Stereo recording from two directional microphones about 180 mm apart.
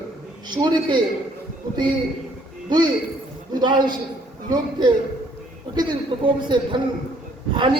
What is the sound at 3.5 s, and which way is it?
Speech, 25° right (ahead or behind).